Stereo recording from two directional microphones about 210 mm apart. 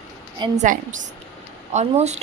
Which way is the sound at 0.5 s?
35° right (ahead or behind).